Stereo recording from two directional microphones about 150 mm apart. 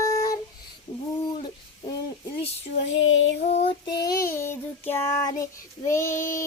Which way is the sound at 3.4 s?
45° left (ahead or behind).